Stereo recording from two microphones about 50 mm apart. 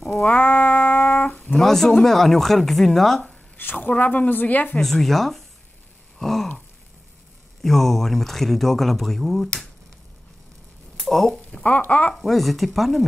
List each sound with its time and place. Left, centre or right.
0.3 s music: left
1.6 s speech: centre
3.7 s speech: left
4.7 s speech: centre
6.1 s gasp: centre
7.6 s speech: centre
11.0 s speech: centre
11.3 s speech: left
12.2 s speech: centre